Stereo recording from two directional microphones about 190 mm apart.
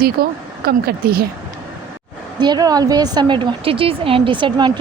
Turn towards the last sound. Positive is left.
turn(degrees=-25)  # may be behind; listen again after turning